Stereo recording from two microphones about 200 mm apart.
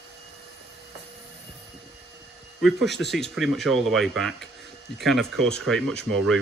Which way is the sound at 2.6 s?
Centre (ahead or behind).